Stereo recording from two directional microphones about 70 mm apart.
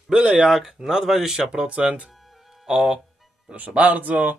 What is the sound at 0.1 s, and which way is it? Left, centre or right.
Speech, centre.